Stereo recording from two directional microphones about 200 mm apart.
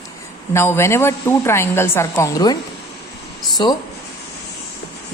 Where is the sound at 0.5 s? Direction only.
10° left (ahead or behind).